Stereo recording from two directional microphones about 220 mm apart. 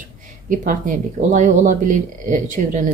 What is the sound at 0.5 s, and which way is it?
Speech, 35° right (ahead or behind).